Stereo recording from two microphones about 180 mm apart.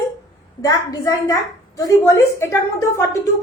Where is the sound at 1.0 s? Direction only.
20° left (ahead or behind).